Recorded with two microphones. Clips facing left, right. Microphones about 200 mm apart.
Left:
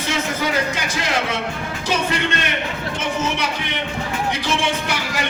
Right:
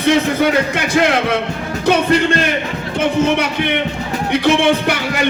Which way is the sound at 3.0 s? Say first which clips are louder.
Right 10 dB; 60° right (ahead or behind).